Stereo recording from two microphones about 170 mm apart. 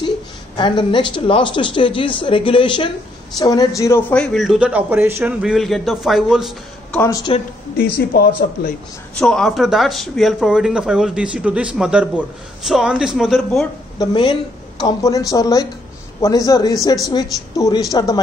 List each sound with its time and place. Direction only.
0.6 s speech: 25° left (ahead or behind); by 6.5 s centre (ahead or behind)
6.9 s speech: 15° left (ahead or behind)
7.7 s a man's voice: 65° left (ahead or behind)
9.2 s speech: centre (ahead or behind)
13.9 s speech: 30° left (ahead or behind)